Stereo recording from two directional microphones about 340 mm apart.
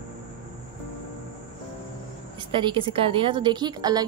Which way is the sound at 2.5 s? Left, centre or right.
Centre.